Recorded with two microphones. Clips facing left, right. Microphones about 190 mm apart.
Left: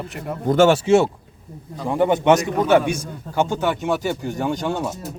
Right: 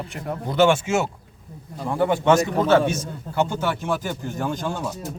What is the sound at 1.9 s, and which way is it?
A man's voice, 20° left (ahead or behind).